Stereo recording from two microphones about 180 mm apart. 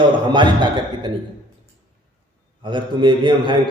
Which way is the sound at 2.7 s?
25° right (ahead or behind).